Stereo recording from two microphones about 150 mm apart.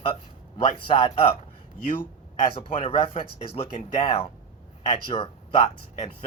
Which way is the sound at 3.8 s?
45° left (ahead or behind).